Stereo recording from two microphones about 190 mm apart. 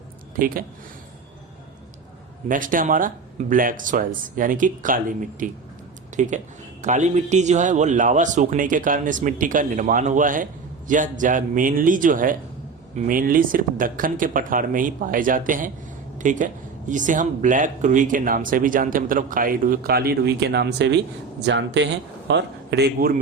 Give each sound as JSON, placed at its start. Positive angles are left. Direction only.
{"t": 0.3, "sound": "a man's voice", "side_deg": -50}
{"t": 2.5, "sound": "a man's voice", "side_deg": -45}